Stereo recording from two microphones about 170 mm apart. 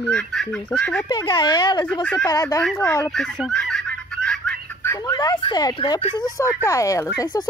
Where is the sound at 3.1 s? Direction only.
Centre (ahead or behind).